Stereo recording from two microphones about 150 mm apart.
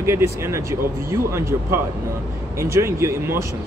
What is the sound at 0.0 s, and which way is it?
Speech, 15° right (ahead or behind).